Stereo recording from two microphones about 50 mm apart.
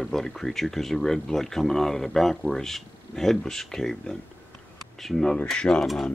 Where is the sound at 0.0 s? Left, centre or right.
Centre.